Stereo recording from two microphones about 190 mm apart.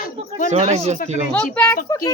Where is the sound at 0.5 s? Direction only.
35° right (ahead or behind).